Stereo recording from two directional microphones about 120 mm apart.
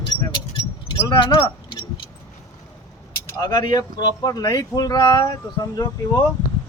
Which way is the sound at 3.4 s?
35° left (ahead or behind).